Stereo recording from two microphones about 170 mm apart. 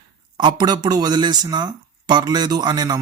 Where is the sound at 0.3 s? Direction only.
25° right (ahead or behind).